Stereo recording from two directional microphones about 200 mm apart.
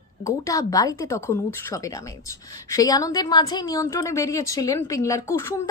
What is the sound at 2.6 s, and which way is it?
A woman's voice, 15° left (ahead or behind).